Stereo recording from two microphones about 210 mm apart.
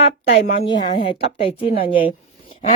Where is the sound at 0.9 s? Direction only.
25° left (ahead or behind).